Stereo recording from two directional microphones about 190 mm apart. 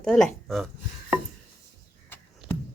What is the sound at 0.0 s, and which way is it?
Speech, 5° left (ahead or behind).